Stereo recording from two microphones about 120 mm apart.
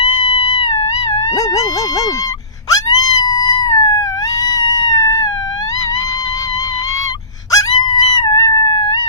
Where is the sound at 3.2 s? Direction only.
35° left (ahead or behind).